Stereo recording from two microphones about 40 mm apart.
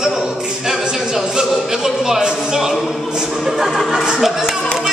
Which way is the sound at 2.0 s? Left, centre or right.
Centre.